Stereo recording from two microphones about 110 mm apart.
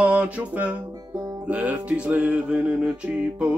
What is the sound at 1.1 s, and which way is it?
Music, 35° right (ahead or behind).